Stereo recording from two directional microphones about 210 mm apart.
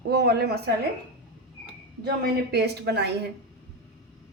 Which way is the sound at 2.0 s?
50° right (ahead or behind).